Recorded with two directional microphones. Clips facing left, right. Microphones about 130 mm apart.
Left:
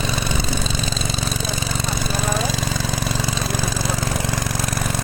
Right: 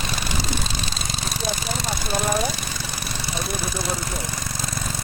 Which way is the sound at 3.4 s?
90° left.